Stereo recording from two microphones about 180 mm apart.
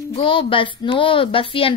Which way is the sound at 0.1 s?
30° left (ahead or behind).